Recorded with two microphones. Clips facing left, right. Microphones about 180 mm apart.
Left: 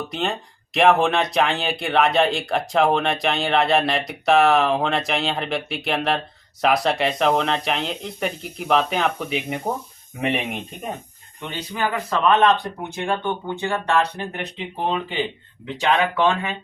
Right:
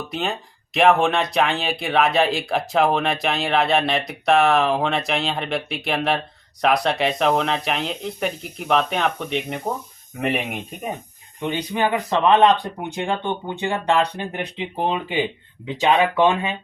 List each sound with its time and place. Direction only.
0.1 s speech: centre (ahead or behind)
11.3 s speech: 15° right (ahead or behind)